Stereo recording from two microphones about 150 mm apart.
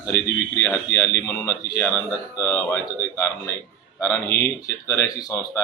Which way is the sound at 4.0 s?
15° left (ahead or behind).